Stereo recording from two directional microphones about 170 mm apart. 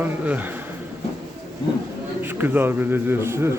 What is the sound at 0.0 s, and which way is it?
Speech, 10° right (ahead or behind).